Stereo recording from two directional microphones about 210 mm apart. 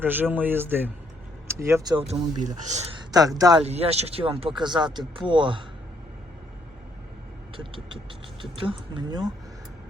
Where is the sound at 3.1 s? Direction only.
15° right (ahead or behind).